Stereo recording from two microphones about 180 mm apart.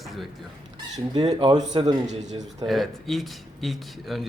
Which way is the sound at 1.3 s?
35° right (ahead or behind).